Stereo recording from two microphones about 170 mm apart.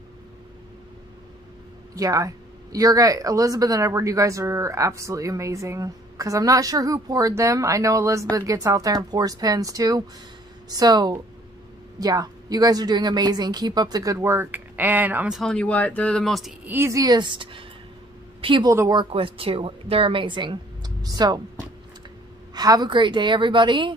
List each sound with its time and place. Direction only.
2.0 s a woman's voice: 20° right (ahead or behind); by 16.5 s centre (ahead or behind)
16.6 s a woman's voice: 15° right (ahead or behind)
22.5 s a woman's voice: 25° right (ahead or behind)